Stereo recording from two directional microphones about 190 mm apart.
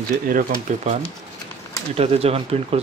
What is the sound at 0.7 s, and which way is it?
Speech, 40° right (ahead or behind).